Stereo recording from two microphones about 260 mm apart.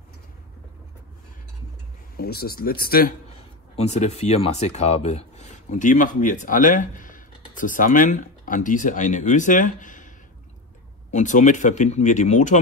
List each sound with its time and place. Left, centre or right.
2.1 s speech: left
3.7 s speech: left